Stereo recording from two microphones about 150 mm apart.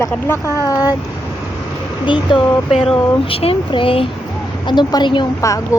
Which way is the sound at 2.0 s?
30° left (ahead or behind).